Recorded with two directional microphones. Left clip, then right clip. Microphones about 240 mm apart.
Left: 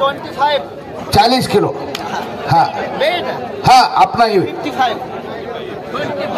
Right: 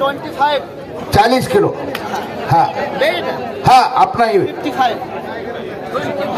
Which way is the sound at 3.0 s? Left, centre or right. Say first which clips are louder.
Even; centre.